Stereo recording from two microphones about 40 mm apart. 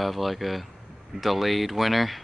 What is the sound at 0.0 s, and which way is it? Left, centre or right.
Speech, centre.